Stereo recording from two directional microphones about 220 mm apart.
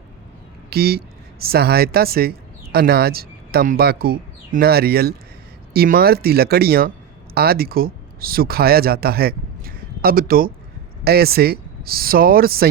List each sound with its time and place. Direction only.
0.7 s speech: 45° right (ahead or behind)